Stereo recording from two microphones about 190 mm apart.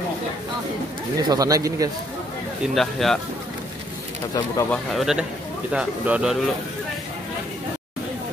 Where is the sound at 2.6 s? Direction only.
Centre (ahead or behind).